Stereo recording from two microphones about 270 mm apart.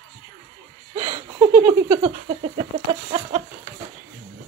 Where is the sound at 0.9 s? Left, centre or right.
Centre.